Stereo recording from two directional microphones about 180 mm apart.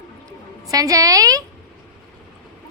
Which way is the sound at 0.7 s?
20° right (ahead or behind).